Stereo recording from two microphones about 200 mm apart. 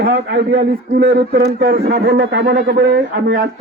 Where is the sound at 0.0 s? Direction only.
55° right (ahead or behind).